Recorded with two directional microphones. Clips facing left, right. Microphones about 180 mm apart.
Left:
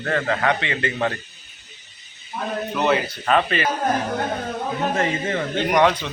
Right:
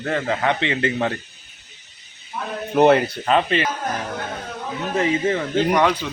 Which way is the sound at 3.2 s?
25° right (ahead or behind).